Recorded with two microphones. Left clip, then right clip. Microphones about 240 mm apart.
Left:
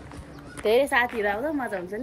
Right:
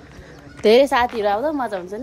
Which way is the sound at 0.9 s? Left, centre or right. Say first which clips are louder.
Right 5 dB; right.